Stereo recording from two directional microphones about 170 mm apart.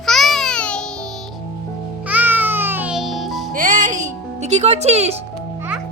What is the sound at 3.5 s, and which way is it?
Music, 50° right (ahead or behind).